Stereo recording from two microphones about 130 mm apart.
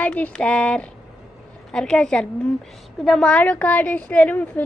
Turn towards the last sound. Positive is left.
turn(degrees=10)  # may be behind; listen again after turning